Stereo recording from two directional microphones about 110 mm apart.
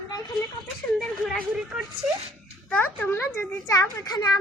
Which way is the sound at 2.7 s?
15° left (ahead or behind).